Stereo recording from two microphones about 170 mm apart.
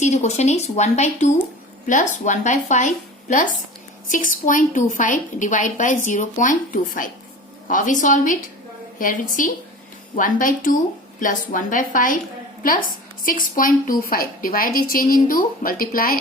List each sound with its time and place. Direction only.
0.0 s a woman's voice: 40° left (ahead or behind)